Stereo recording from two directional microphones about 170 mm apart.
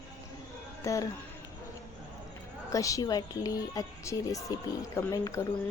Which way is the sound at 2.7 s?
20° left (ahead or behind).